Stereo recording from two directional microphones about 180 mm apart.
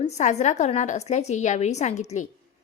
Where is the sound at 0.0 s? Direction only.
40° left (ahead or behind).